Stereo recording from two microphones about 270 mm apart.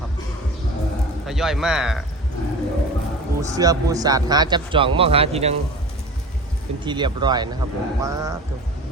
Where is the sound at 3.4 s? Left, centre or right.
Centre.